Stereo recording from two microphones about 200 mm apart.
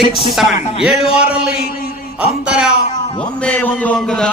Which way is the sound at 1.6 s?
50° left (ahead or behind).